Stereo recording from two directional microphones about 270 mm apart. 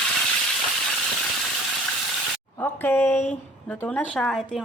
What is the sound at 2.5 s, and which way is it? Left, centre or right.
A woman's voice, centre.